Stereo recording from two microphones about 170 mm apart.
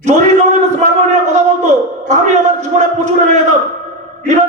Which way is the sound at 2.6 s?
45° right (ahead or behind).